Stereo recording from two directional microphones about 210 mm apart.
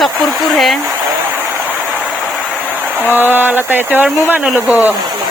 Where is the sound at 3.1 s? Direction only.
10° right (ahead or behind).